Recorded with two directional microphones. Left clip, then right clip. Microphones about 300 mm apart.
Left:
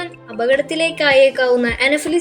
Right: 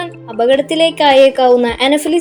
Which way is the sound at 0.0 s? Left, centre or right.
Centre.